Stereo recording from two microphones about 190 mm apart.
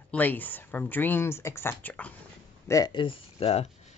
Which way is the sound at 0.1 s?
10° left (ahead or behind).